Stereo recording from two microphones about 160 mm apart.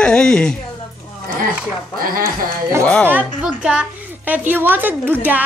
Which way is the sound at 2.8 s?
10° left (ahead or behind).